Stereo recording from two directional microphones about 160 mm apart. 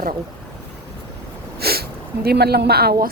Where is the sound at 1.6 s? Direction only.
75° right (ahead or behind).